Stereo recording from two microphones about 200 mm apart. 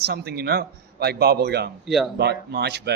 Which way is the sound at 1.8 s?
Centre (ahead or behind).